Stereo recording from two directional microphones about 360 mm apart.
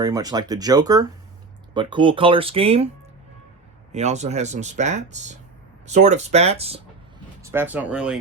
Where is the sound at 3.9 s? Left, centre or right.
Centre.